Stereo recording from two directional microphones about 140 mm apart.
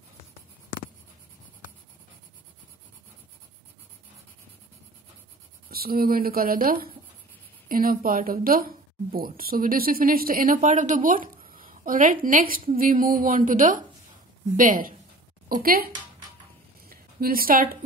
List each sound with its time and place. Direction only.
5.7 s a woman's voice: 90° right
15.6 s speech: 90° right
16.9 s a woman's voice: 90° right